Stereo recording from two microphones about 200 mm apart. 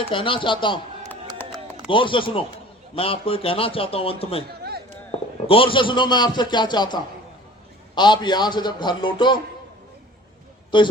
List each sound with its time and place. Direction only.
0.1 s a man's voice: 25° left (ahead or behind)
1.4 s music: 10° left (ahead or behind)
1.9 s a man's voice: 25° left (ahead or behind)
5.1 s a sound: 30° left (ahead or behind)
5.5 s a man's voice: 25° left (ahead or behind)
10.7 s a man's voice: 25° left (ahead or behind)